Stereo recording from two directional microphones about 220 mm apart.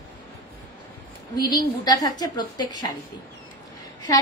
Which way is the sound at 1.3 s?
20° left (ahead or behind).